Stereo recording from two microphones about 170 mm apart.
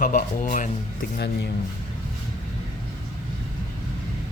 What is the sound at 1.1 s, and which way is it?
Speech, 90° left.